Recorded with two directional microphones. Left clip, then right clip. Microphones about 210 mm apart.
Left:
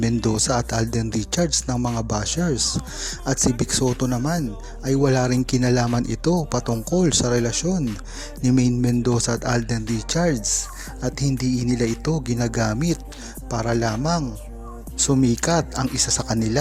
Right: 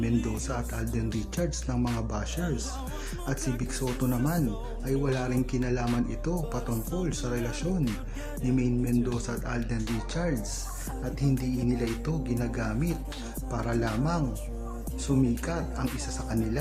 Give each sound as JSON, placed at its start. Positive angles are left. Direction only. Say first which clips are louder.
{"t": 0.0, "sound": "speech", "louder": "left 9 dB", "side_deg": 35}